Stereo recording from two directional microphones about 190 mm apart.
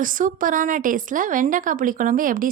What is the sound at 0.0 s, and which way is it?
Speech, 45° right (ahead or behind).